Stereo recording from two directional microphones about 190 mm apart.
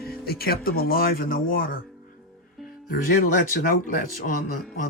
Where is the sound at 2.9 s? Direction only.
45° left (ahead or behind).